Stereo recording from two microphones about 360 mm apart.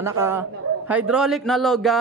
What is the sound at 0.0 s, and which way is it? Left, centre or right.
A man's voice, centre.